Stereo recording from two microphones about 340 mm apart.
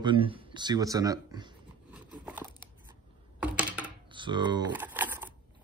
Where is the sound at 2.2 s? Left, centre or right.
Centre.